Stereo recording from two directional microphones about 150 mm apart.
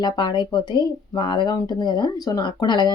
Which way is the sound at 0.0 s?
30° left (ahead or behind).